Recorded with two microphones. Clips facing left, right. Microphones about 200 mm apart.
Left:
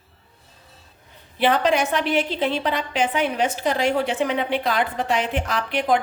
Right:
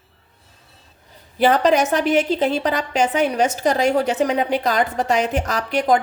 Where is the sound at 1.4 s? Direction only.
40° right (ahead or behind).